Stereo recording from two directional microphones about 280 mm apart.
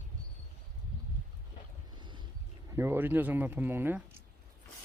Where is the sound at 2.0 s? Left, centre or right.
Centre.